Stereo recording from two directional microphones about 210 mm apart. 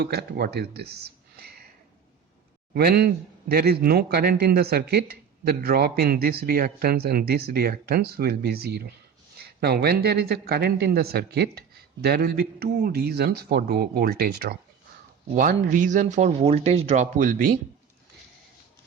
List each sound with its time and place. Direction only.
0.0 s speech: 50° right (ahead or behind)
2.7 s speech: 50° right (ahead or behind)
15.4 s speech: 40° right (ahead or behind)